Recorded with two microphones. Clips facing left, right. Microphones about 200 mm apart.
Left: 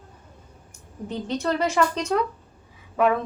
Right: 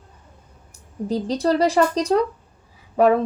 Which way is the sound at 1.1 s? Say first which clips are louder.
Right 6 dB; 35° right (ahead or behind).